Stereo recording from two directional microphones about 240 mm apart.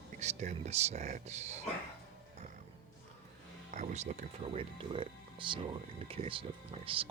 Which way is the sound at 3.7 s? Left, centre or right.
Right.